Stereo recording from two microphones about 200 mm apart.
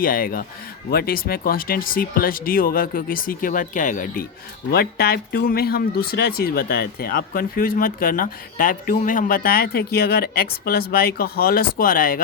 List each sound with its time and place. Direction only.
0.0 s speech: 45° left (ahead or behind)